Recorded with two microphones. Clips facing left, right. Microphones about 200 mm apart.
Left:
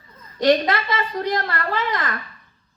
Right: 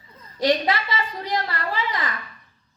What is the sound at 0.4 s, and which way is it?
A woman's voice, 50° left (ahead or behind).